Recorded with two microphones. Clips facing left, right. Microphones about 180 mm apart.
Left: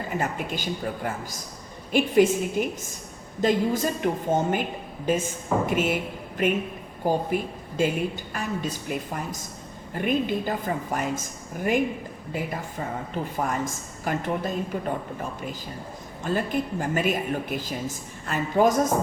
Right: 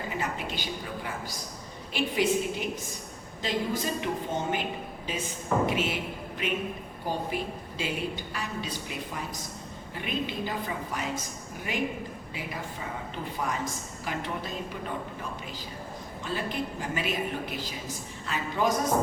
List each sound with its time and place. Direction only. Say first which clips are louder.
0.2 s a woman's voice: left 5 dB; 45° left (ahead or behind)
13.3 s a woman's voice: left 3 dB; 50° left (ahead or behind)
16.2 s a woman's voice: left 6 dB; 50° left (ahead or behind)